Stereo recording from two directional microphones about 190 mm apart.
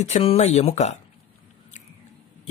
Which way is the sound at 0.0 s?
35° left (ahead or behind).